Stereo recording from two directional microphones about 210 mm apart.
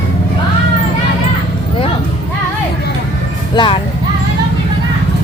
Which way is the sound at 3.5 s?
25° left (ahead or behind).